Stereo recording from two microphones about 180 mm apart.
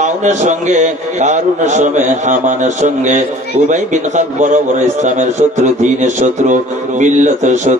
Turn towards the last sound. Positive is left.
turn(degrees=-40)  # may be behind; listen again after turning